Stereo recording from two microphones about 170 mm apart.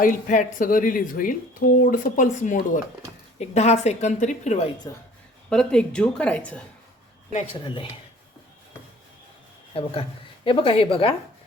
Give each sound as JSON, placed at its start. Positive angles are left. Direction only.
{"t": 0.0, "sound": "a woman's voice", "side_deg": 50}
{"t": 5.5, "sound": "speech", "side_deg": 5}
{"t": 7.3, "sound": "a woman's voice", "side_deg": 30}
{"t": 9.7, "sound": "a woman's voice", "side_deg": 35}